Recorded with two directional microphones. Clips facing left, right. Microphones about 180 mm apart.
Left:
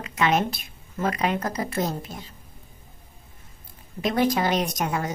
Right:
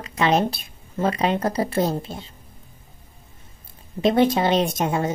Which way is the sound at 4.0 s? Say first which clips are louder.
Right 5 dB; 25° right (ahead or behind).